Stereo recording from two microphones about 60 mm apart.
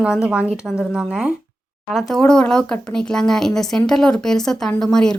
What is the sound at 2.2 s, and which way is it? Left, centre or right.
A woman's voice, centre.